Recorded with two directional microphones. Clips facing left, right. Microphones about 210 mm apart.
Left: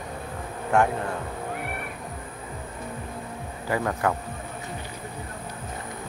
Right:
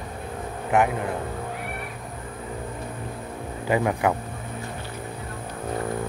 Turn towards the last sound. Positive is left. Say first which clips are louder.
# right 3 dB
turn(degrees=-15)  # may be behind; listen again after turning